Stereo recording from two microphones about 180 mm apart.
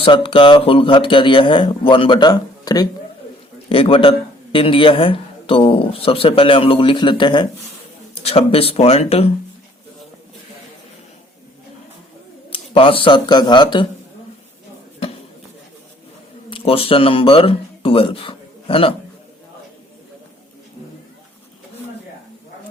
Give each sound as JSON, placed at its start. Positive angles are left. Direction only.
{"t": 0.0, "sound": "speech", "side_deg": 30}
{"t": 12.5, "sound": "speech", "side_deg": 30}
{"t": 16.5, "sound": "speech", "side_deg": 30}